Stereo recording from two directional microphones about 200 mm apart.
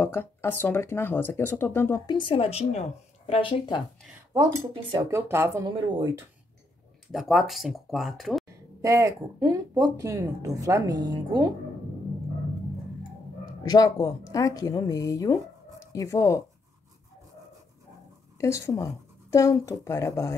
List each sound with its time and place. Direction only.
0.0 s speech: 10° left (ahead or behind)
2.0 s speech: 25° left (ahead or behind)
4.3 s speech: 20° right (ahead or behind)
7.1 s speech: centre (ahead or behind)
8.8 s speech: 15° right (ahead or behind)
13.7 s speech: 20° left (ahead or behind)
18.4 s speech: 15° left (ahead or behind)